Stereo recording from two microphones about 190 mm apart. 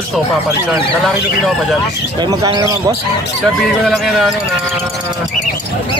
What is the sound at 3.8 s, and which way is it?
Speech, centre (ahead or behind).